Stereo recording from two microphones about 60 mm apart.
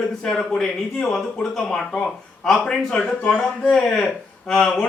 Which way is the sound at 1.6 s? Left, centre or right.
Centre.